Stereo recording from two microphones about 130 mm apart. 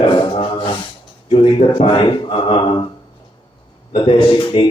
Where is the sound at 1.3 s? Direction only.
45° left (ahead or behind).